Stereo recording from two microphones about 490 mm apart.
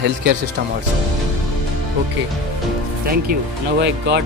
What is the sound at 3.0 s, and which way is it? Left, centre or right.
Speech, centre.